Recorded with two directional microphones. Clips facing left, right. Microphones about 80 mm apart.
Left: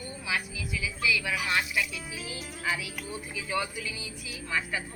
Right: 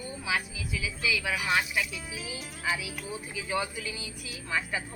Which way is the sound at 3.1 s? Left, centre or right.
Right.